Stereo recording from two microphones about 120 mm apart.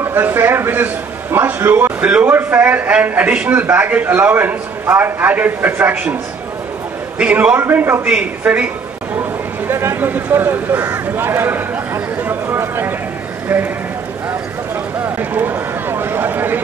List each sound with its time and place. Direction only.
0.0 s a man's voice: 15° right (ahead or behind)
7.2 s a man's voice: 10° right (ahead or behind)
9.7 s speech: 20° right (ahead or behind)
15.0 s a sound: 15° right (ahead or behind)